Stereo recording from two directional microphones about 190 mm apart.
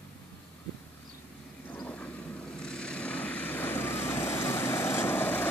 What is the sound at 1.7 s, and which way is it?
Vehicle, 10° left (ahead or behind).